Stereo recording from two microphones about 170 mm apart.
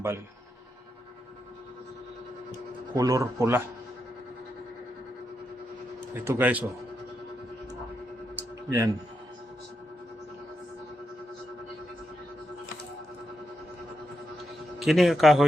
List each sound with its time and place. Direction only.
2.9 s a man's voice: 20° right (ahead or behind)
6.2 s a man's voice: 15° right (ahead or behind)
8.4 s a sound: 20° right (ahead or behind)
14.8 s a man's voice: centre (ahead or behind)